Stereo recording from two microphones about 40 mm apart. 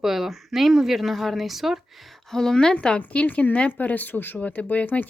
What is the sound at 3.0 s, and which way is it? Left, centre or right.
Speech, left.